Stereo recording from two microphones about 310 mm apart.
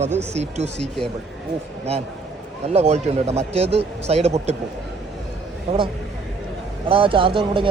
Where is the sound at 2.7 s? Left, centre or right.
Centre.